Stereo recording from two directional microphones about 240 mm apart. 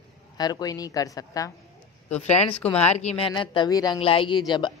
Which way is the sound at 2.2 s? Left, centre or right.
Left.